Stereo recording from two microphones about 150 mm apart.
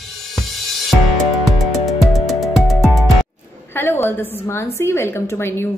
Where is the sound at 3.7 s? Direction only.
15° left (ahead or behind).